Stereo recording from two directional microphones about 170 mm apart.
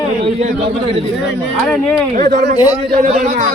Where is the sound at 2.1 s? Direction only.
45° right (ahead or behind).